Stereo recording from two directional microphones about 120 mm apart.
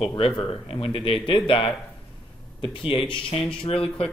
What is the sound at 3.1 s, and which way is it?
Speech, 50° left (ahead or behind).